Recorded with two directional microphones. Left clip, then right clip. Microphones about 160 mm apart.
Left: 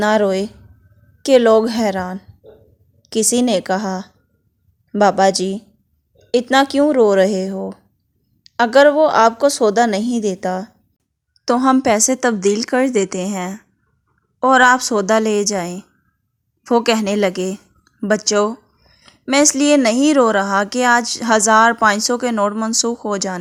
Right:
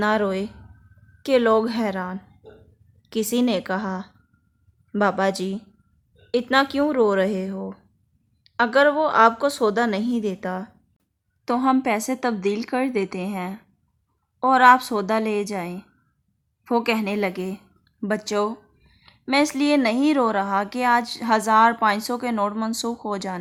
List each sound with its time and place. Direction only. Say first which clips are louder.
0.0 s speech: left 7 dB; 30° left (ahead or behind)